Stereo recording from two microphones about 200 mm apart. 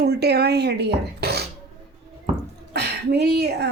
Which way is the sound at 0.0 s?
55° right (ahead or behind).